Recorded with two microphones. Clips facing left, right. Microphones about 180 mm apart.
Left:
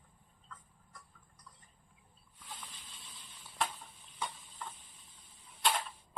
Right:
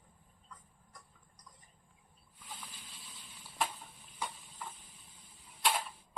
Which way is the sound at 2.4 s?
10° right (ahead or behind).